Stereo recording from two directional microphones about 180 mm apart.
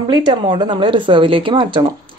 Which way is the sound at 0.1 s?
25° right (ahead or behind).